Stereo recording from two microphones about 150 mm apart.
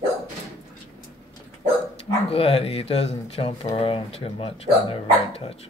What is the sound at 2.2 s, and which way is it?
Speech, 40° left (ahead or behind).